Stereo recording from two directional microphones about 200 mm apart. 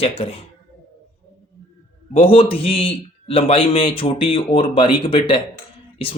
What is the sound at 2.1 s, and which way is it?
Speech, 30° left (ahead or behind).